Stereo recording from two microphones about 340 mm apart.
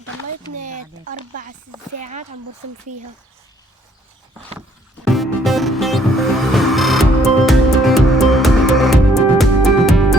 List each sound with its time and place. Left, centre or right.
2.0 s speech: right
5.0 s music: centre